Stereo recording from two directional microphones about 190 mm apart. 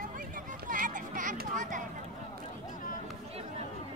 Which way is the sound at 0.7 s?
45° right (ahead or behind).